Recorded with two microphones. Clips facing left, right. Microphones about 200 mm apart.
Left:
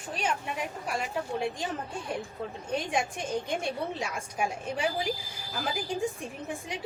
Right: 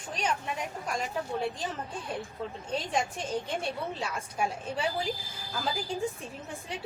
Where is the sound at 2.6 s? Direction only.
10° left (ahead or behind).